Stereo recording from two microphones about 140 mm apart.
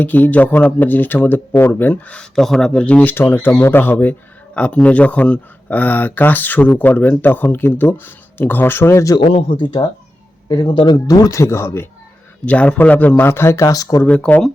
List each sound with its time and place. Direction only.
0.0 s speech: 10° left (ahead or behind)
9.3 s speech: 35° left (ahead or behind)
14.0 s speech: 10° left (ahead or behind)